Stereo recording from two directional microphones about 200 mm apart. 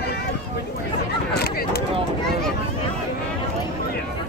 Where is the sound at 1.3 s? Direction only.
50° left (ahead or behind).